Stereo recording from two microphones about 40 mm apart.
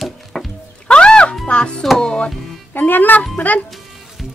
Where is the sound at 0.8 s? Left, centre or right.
Left.